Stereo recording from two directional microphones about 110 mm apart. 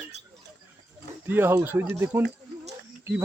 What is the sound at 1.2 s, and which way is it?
Speech, 20° right (ahead or behind).